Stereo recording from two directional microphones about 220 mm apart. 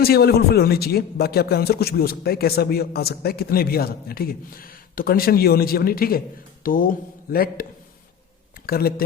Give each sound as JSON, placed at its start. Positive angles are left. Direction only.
{"t": 0.0, "sound": "a man's voice", "side_deg": 45}